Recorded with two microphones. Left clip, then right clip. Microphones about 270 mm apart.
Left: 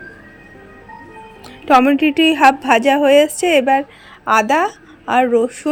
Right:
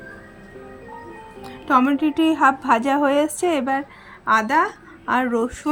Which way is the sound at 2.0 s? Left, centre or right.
Centre.